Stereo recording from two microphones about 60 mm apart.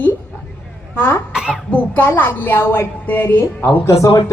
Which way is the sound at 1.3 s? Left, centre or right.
Centre.